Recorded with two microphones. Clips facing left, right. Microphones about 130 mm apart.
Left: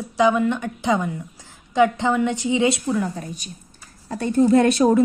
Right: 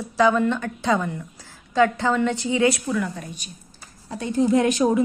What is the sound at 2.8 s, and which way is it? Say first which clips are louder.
Speech: left 2 dB; 35° left (ahead or behind).